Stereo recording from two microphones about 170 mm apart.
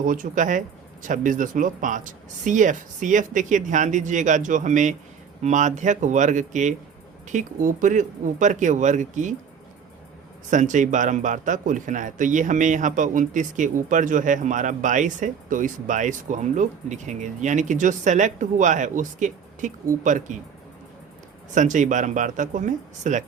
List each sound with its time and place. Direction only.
0.0 s a man's voice: 50° right (ahead or behind)
10.5 s a man's voice: 50° right (ahead or behind)
21.5 s a man's voice: 45° right (ahead or behind)